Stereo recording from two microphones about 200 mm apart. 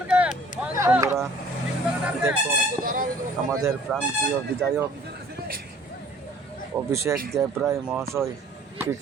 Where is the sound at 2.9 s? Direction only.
45° right (ahead or behind).